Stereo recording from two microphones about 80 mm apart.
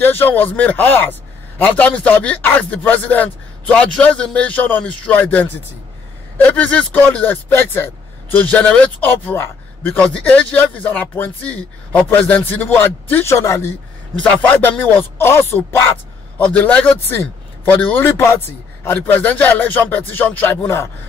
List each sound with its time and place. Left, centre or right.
0.0 s speech: left
9.9 s speech: centre; by 13.7 s left
14.3 s speech: centre
16.3 s a man's voice: centre
18.1 s speech: left
18.9 s speech: left